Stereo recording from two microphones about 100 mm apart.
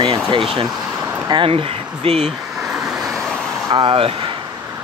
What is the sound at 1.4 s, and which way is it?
Speech, 70° right (ahead or behind).